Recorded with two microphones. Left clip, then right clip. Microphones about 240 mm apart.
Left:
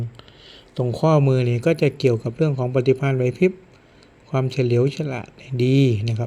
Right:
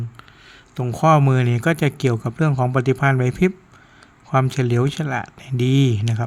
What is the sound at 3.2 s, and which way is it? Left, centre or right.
Speech, right.